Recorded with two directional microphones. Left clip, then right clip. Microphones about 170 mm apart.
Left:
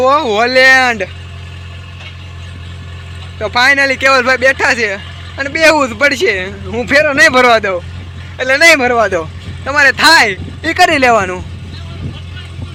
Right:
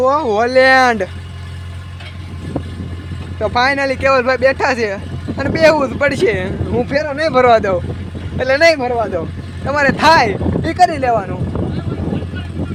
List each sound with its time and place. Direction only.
0.0 s speech: centre (ahead or behind)
3.4 s speech: 10° right (ahead or behind)
5.6 s speech: centre (ahead or behind)
6.9 s speech: 20° left (ahead or behind)
7.3 s speech: 5° right (ahead or behind)
8.8 s speech: 30° left (ahead or behind)
9.6 s speech: 10° right (ahead or behind)
10.8 s speech: 20° left (ahead or behind)